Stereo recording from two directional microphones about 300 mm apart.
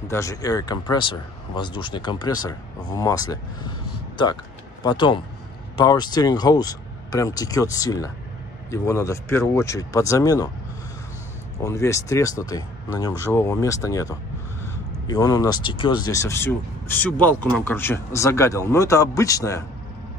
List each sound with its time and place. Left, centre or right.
0.1 s speech: centre
4.8 s speech: centre
11.6 s speech: centre